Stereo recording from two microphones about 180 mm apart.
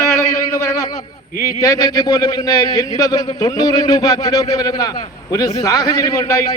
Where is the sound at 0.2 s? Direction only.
15° left (ahead or behind).